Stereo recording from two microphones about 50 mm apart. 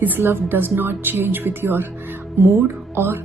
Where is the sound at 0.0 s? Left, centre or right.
Right.